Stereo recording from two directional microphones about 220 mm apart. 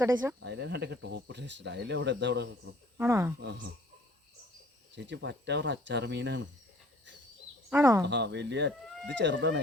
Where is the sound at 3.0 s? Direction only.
10° right (ahead or behind).